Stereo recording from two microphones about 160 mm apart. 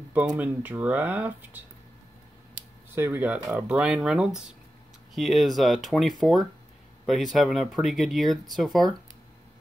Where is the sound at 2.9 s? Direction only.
15° right (ahead or behind).